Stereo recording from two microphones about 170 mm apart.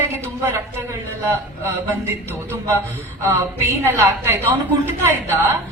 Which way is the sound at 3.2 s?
15° right (ahead or behind).